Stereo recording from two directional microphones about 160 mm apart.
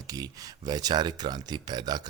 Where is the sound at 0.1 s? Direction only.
25° right (ahead or behind).